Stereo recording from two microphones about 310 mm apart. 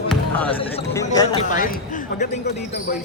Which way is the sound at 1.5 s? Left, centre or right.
Left.